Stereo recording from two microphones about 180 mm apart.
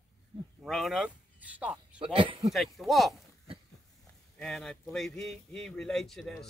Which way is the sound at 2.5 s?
Centre (ahead or behind).